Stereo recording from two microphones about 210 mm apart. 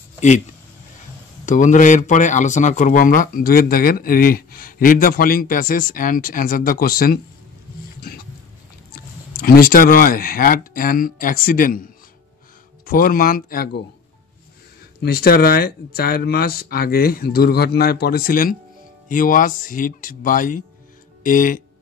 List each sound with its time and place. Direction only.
1.4 s speech: 35° left (ahead or behind)
9.4 s speech: 45° left (ahead or behind)
15.0 s speech: 50° left (ahead or behind)